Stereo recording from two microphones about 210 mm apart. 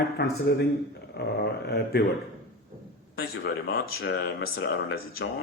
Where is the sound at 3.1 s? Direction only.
45° left (ahead or behind).